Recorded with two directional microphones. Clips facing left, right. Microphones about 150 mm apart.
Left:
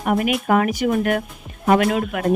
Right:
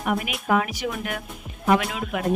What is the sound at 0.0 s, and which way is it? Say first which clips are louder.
Speech: left 7 dB; 45° left (ahead or behind).